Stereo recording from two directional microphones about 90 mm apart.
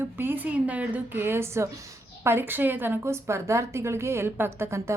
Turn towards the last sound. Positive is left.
turn(degrees=-30)  # may be behind; listen again after turning